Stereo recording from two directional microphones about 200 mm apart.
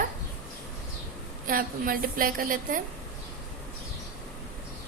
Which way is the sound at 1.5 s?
45° right (ahead or behind).